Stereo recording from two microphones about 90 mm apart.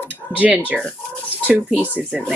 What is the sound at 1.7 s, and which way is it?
Speech, 20° right (ahead or behind).